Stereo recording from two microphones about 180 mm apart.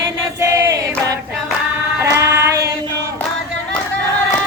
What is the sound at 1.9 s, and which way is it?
Female singing, 15° right (ahead or behind).